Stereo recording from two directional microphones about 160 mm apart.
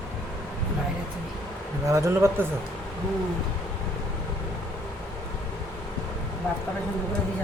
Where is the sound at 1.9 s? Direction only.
20° right (ahead or behind).